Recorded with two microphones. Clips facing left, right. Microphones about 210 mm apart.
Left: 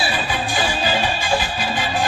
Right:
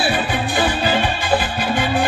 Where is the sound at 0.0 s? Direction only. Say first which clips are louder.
Right 4 dB; 60° right (ahead or behind).